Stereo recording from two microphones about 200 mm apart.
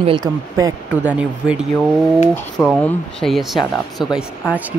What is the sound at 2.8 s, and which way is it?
Speech, centre (ahead or behind).